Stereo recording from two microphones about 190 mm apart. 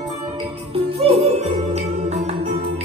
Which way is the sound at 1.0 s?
35° right (ahead or behind).